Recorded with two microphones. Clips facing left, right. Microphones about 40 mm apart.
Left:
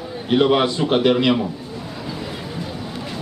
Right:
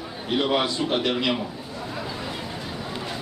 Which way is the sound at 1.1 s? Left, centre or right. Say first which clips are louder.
Left 7 dB; centre.